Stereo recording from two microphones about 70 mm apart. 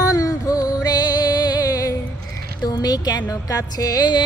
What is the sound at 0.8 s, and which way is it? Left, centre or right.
Music, left.